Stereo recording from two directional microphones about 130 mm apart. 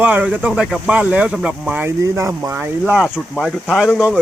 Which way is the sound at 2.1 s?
20° right (ahead or behind).